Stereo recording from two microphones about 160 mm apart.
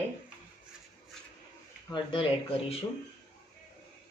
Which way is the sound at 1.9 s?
30° left (ahead or behind).